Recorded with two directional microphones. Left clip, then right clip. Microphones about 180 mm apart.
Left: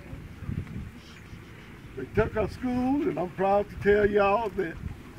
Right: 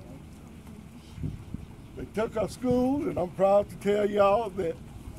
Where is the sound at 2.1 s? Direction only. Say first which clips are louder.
Left 2 dB; 15° right (ahead or behind).